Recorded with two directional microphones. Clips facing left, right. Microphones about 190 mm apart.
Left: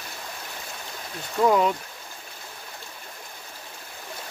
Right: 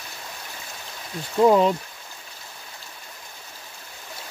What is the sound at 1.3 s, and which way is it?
Speech, 25° right (ahead or behind).